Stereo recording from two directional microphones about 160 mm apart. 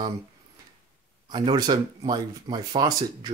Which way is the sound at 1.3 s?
30° right (ahead or behind).